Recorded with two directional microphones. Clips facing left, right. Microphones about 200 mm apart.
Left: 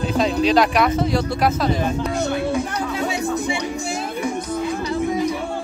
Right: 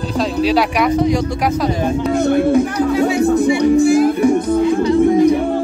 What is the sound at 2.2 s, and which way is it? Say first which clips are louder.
Speech: right 11 dB; 50° right (ahead or behind).